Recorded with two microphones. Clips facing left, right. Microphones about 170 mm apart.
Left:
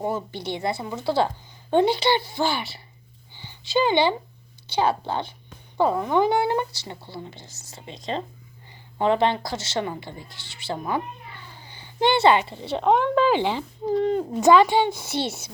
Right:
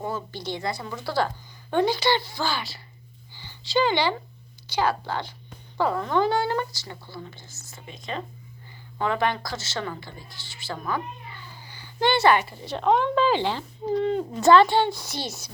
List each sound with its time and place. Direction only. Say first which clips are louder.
0.0 s speech: left 4 dB; 25° left (ahead or behind)
3.3 s a sound: left 1 dB; 20° left (ahead or behind)
4.7 s speech: left 2 dB; 25° left (ahead or behind)
9.0 s a woman's voice: left 4 dB; 25° left (ahead or behind)